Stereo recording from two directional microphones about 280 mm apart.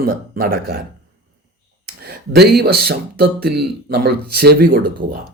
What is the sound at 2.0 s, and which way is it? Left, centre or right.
Speech, right.